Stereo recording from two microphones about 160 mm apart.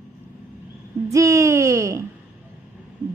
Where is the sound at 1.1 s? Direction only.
20° right (ahead or behind).